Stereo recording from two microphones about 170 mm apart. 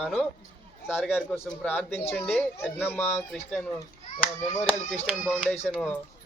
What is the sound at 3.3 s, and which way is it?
Speech, centre (ahead or behind).